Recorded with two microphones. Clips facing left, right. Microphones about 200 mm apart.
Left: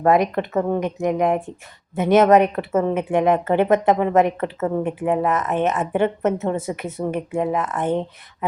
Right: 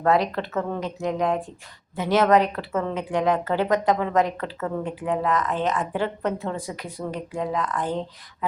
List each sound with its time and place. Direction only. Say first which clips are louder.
0.0 s speech: left 4 dB; 20° left (ahead or behind)